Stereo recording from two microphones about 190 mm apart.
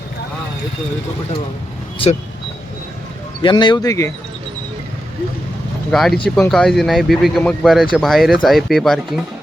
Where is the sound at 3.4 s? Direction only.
25° left (ahead or behind).